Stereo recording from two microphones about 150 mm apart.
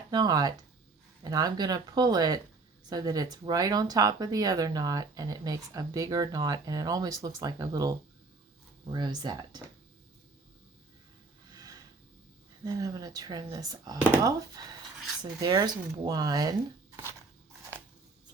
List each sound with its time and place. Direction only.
0.1 s speech: 25° right (ahead or behind)
11.5 s a sound: 25° right (ahead or behind)
12.6 s speech: 25° right (ahead or behind)